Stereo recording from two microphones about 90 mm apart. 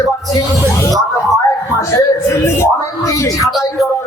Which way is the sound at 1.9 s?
35° left (ahead or behind).